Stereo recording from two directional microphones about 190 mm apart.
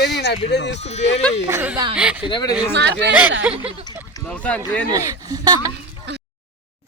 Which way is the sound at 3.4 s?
5° right (ahead or behind).